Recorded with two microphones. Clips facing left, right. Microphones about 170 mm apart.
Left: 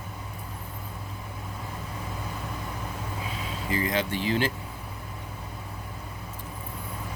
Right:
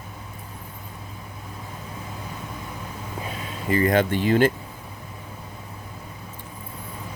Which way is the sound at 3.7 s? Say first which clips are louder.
Right 8 dB; 55° right (ahead or behind).